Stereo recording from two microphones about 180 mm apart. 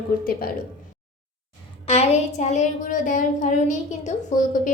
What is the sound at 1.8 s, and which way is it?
A woman's voice, 35° left (ahead or behind).